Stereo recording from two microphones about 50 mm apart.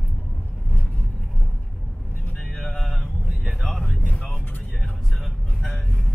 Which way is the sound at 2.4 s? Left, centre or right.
Centre.